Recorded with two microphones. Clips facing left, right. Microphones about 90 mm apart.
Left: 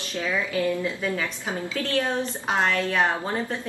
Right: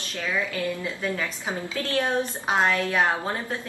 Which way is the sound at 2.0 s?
15° right (ahead or behind).